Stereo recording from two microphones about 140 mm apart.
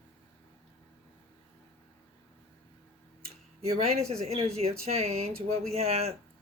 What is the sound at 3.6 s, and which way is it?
Speech, 50° right (ahead or behind).